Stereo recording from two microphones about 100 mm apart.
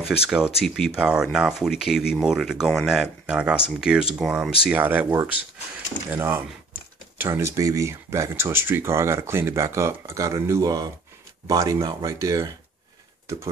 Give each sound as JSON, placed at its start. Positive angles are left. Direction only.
{"t": 0.0, "sound": "speech", "side_deg": -5}
{"t": 4.6, "sound": "speech", "side_deg": -15}